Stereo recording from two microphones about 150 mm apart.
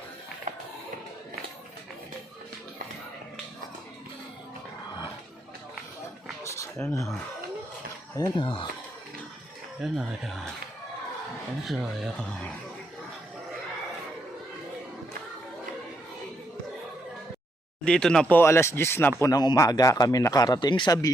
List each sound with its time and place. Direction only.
6.4 s a sound: 20° left (ahead or behind)
8.1 s speech: 25° left (ahead or behind)
9.8 s speech: centre (ahead or behind)
11.6 s speech: centre (ahead or behind)
17.8 s speech: 5° left (ahead or behind)
19.2 s speech: 25° left (ahead or behind)